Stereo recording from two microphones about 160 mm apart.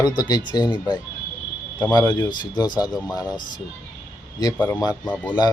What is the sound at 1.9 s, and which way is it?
Speech, 25° left (ahead or behind).